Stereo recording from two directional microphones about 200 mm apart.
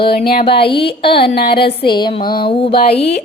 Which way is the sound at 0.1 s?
50° left (ahead or behind).